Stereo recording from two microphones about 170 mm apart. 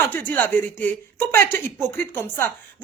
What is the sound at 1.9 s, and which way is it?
Speech, 15° left (ahead or behind).